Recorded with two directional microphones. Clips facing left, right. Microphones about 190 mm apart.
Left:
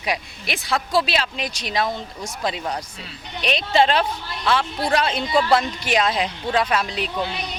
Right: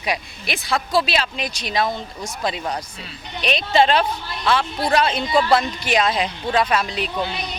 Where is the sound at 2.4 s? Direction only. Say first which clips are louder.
Right 1 dB; 25° right (ahead or behind).